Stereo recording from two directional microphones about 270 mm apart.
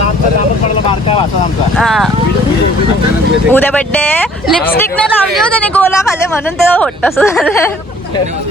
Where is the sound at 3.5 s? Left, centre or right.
Centre.